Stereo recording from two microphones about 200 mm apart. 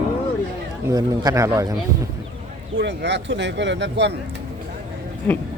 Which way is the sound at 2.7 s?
60° right (ahead or behind).